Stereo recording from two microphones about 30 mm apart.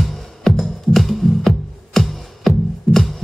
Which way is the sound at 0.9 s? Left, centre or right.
Centre.